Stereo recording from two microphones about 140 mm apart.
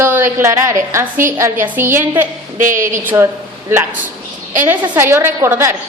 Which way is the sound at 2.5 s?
70° right (ahead or behind).